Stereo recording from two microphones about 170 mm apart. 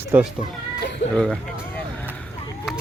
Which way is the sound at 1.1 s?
5° left (ahead or behind).